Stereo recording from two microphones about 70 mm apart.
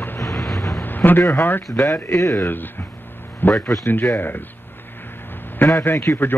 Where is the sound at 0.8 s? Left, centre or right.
Left.